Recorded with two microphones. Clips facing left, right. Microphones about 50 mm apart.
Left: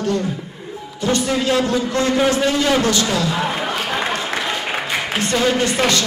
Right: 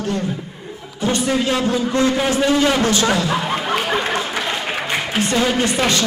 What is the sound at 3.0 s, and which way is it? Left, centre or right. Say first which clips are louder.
Music: right 2 dB; right.